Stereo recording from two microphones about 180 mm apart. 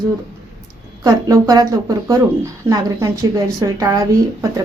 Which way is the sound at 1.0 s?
20° right (ahead or behind).